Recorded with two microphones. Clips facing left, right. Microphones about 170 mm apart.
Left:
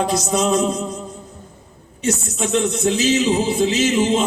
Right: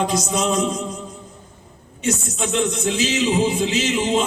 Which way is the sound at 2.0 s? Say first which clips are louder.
Left 1 dB; 35° left (ahead or behind).